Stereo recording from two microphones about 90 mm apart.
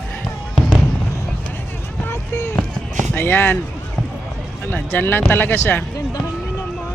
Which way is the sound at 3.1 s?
25° left (ahead or behind).